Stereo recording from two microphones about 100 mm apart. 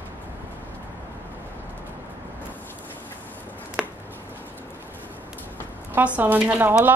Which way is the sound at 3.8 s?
5° right (ahead or behind).